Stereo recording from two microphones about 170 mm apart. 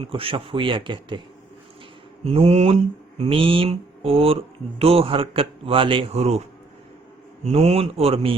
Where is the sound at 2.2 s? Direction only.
35° right (ahead or behind).